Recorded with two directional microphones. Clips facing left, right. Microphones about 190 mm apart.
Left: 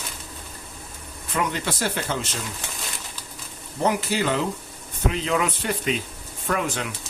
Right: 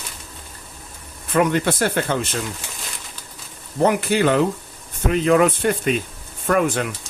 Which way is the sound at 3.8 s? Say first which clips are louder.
Right 6 dB; 55° right (ahead or behind).